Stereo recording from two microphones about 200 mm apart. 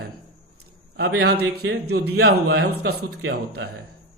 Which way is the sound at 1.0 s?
55° right (ahead or behind).